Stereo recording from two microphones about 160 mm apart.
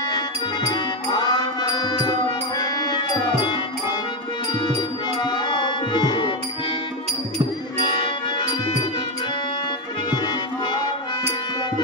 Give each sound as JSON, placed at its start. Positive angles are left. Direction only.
{"t": 0.7, "sound": "music", "side_deg": 25}
{"t": 4.6, "sound": "music", "side_deg": 30}
{"t": 7.8, "sound": "music", "side_deg": 30}
{"t": 10.1, "sound": "music", "side_deg": 30}